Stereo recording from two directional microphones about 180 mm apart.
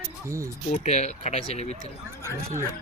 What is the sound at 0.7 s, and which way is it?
Speech, 40° left (ahead or behind).